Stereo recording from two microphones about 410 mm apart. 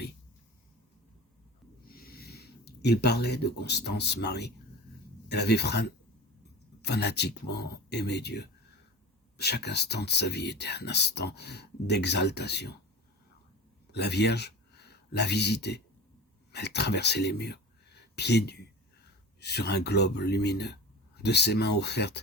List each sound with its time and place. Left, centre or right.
1.8 s speech: left
13.9 s speech: left